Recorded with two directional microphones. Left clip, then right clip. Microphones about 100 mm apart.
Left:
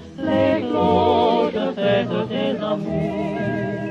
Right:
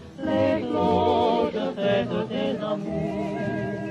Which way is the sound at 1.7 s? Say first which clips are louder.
Left 4 dB; 20° left (ahead or behind).